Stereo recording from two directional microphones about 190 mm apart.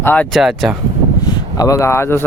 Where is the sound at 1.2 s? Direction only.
20° left (ahead or behind).